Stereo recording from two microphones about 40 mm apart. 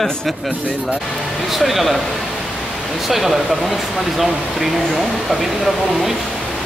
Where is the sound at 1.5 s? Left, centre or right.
Centre.